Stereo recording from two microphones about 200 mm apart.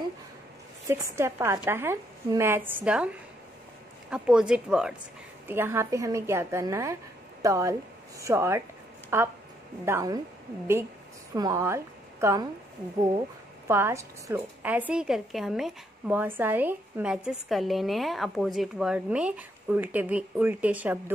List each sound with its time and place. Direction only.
0.8 s a woman's voice: 15° right (ahead or behind)
11.3 s a woman's voice: 15° right (ahead or behind)
13.7 s a woman's voice: 10° right (ahead or behind)